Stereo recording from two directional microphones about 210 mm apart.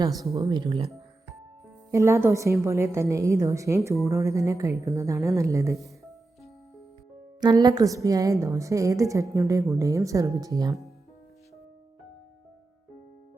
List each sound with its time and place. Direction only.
0.2 s speech: 15° right (ahead or behind)
1.9 s a woman's voice: 15° right (ahead or behind)
7.4 s a woman's voice: 20° right (ahead or behind)